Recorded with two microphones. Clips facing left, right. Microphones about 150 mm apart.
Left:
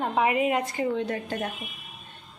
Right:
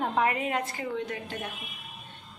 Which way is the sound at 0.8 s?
35° left (ahead or behind).